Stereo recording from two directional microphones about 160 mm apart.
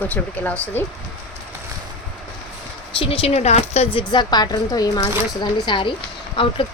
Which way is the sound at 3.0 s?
35° left (ahead or behind).